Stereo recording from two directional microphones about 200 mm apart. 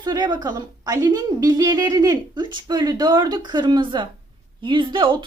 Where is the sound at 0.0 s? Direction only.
20° right (ahead or behind).